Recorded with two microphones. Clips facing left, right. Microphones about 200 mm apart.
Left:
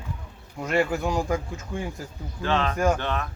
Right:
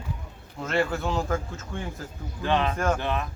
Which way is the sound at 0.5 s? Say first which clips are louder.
Left 2 dB; 10° left (ahead or behind).